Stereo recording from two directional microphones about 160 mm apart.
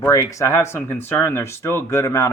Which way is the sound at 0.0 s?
20° left (ahead or behind).